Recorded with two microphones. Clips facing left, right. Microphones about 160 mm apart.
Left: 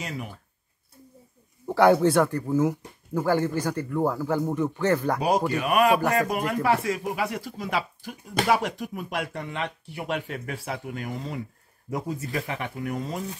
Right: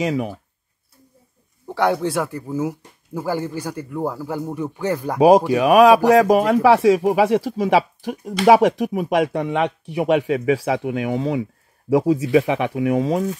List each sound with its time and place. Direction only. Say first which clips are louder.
0.0 s speech: right 13 dB; 90° right
1.7 s speech: left 2 dB; centre (ahead or behind)
5.2 s speech: right 11 dB; 90° right